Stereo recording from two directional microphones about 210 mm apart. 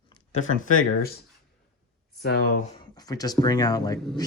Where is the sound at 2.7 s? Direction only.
20° left (ahead or behind).